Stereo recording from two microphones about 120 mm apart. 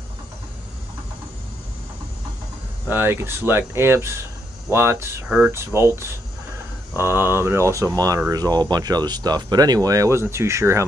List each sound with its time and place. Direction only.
2.9 s speech: 20° right (ahead or behind)